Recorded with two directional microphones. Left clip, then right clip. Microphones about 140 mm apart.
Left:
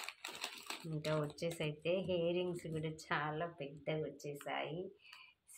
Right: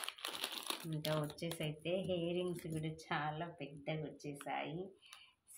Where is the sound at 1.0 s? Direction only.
25° left (ahead or behind).